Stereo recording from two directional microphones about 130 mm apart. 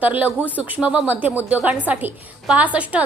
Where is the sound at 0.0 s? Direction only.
15° right (ahead or behind).